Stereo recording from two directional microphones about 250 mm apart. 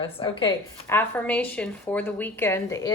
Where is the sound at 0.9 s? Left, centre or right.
Centre.